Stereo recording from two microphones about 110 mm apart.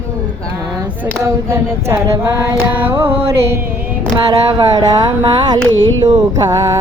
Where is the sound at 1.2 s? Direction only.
25° right (ahead or behind).